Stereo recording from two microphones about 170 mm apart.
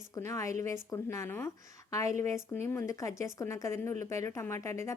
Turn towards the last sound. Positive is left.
turn(degrees=15)  # may be behind; listen again after turning